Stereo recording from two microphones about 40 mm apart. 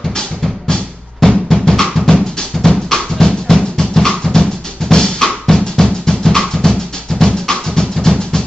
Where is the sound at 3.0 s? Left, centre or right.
Centre.